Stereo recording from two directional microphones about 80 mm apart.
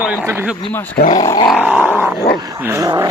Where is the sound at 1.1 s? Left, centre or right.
Left.